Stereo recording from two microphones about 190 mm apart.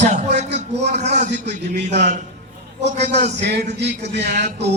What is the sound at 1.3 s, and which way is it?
Mantra, 65° right (ahead or behind).